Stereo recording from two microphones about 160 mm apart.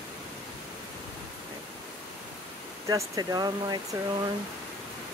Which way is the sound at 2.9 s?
25° right (ahead or behind).